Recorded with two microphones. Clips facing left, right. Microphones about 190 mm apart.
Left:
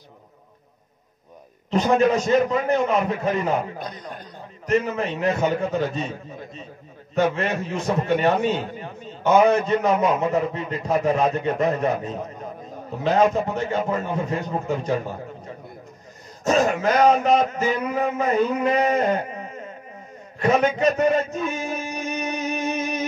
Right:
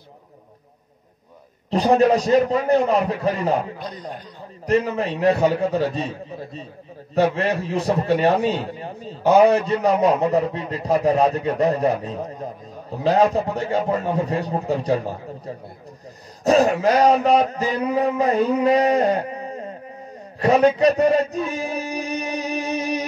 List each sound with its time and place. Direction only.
1.7 s a man's voice: 35° right (ahead or behind)
3.7 s speech: 50° left (ahead or behind)
4.6 s a man's voice: 35° right (ahead or behind)
20.3 s a sound: 35° right (ahead or behind)